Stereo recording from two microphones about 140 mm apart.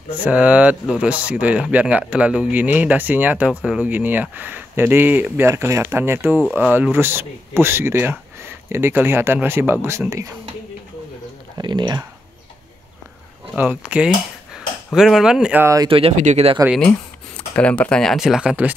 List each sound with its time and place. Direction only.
0.2 s speech: 10° right (ahead or behind)
11.5 s speech: 30° right (ahead or behind)
13.6 s speech: 10° right (ahead or behind)
15.6 s speech: 25° right (ahead or behind)
15.9 s speech: 45° right (ahead or behind)
17.6 s speech: 10° left (ahead or behind); by 18.8 s 10° right (ahead or behind)